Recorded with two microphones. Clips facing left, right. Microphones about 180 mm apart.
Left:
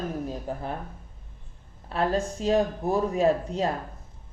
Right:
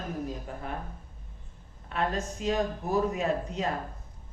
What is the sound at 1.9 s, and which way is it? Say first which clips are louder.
Speech: left 5 dB; 35° left (ahead or behind).